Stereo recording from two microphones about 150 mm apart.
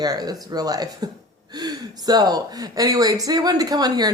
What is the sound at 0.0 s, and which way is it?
Speech, 25° right (ahead or behind).